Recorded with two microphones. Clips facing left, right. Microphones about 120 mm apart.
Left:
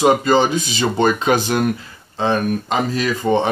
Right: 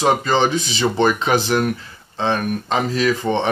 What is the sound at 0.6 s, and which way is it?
Speech, 45° left (ahead or behind).